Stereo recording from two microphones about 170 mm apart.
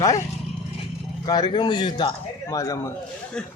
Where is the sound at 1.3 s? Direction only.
25° left (ahead or behind).